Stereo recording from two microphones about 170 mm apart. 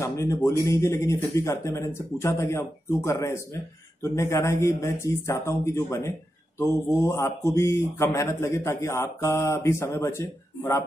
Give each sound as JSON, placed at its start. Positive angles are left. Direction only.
{"t": 0.0, "sound": "speech", "side_deg": 15}